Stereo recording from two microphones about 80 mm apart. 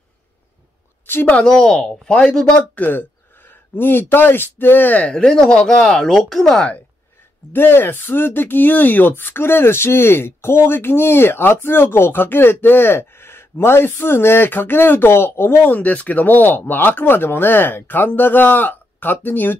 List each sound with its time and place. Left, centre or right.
1.0 s a sound: left
1.3 s speech: centre
2.7 s speech: left; by 6.7 s centre
7.5 s speech: left